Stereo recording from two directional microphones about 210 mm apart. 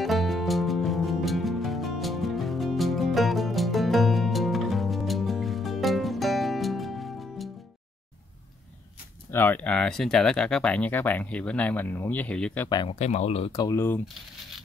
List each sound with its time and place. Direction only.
0.0 s music: centre (ahead or behind)
9.3 s speech: 10° left (ahead or behind)
12.6 s speech: 20° left (ahead or behind)
13.0 s speech: 30° left (ahead or behind); by 14.0 s 10° left (ahead or behind)